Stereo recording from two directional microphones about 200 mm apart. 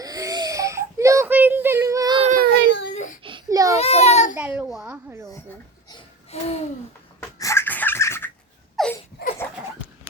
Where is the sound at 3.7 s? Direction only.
30° left (ahead or behind).